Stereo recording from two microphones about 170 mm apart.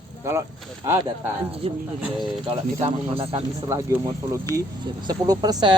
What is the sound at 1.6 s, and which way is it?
Speech, 35° right (ahead or behind).